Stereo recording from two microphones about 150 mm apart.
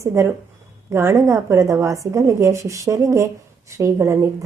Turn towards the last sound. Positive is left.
turn(degrees=-20)  # may be behind; listen again after turning